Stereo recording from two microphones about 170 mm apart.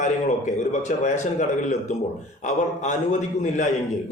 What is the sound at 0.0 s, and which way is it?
A man's voice, 45° left (ahead or behind).